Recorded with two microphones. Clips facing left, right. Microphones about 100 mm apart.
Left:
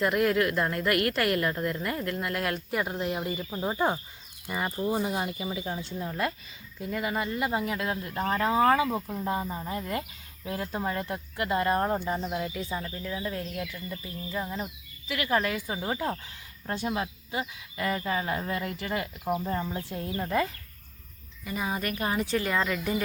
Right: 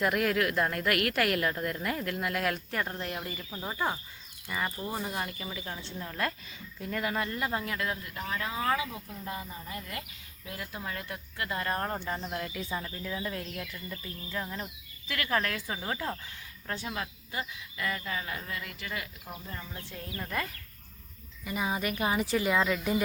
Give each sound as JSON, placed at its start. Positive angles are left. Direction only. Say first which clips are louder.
{"t": 0.0, "sound": "a woman's voice", "louder": "left 3 dB", "side_deg": 0}
{"t": 19.7, "sound": "speech", "louder": "left 8 dB", "side_deg": 25}
{"t": 21.4, "sound": "a woman's voice", "louder": "even", "side_deg": -5}